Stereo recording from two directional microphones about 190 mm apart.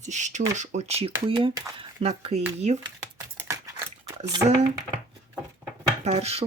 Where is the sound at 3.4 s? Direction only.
15° right (ahead or behind).